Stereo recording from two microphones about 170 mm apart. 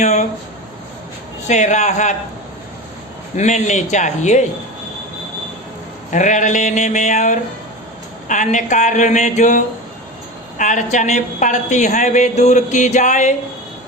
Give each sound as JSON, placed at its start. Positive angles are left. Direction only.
{"t": 0.0, "sound": "speech", "side_deg": 45}
{"t": 1.5, "sound": "a woman's voice", "side_deg": 45}
{"t": 3.3, "sound": "a woman's voice", "side_deg": 45}
{"t": 6.1, "sound": "a woman's voice", "side_deg": 45}